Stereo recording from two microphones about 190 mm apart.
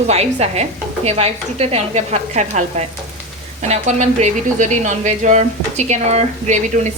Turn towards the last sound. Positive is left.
turn(degrees=-40)  # may be behind; listen again after turning